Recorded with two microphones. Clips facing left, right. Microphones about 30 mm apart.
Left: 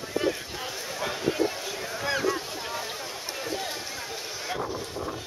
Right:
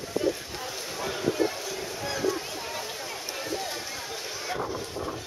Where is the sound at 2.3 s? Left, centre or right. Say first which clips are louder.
Left 1 dB; centre.